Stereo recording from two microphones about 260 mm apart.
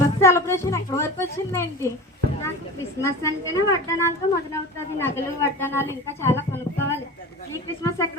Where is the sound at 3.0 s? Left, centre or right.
Centre.